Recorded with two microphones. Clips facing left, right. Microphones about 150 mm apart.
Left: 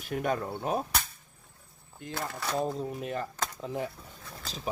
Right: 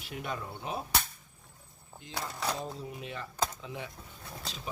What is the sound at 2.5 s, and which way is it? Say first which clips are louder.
Speech: left 8 dB; 50° left (ahead or behind).